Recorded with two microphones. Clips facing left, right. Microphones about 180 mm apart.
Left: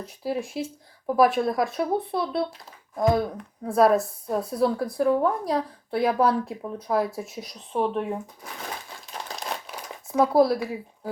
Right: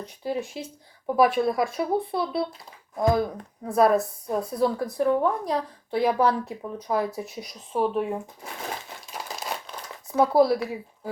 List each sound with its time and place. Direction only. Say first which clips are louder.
0.0 s a woman's voice: even; 5° left (ahead or behind)
9.3 s crumpling: even; centre (ahead or behind)
10.1 s a woman's voice: even; centre (ahead or behind)